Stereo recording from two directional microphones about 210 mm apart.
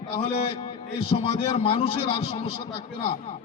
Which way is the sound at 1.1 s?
25° left (ahead or behind).